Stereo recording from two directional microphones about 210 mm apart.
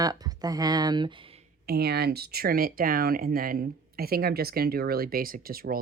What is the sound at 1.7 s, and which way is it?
Speech, 50° right (ahead or behind).